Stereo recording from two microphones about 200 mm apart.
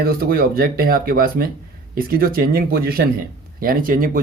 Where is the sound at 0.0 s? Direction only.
50° right (ahead or behind).